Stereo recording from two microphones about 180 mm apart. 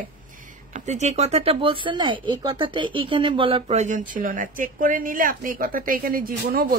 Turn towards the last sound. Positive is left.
turn(degrees=-50)  # may be behind; listen again after turning